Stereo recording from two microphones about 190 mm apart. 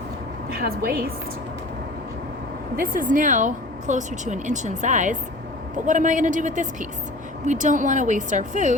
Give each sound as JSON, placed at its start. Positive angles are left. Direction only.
{"t": 0.5, "sound": "a woman's voice", "side_deg": -50}
{"t": 2.7, "sound": "speech", "side_deg": -45}